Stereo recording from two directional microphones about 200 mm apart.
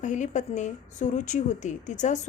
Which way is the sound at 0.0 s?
40° left (ahead or behind).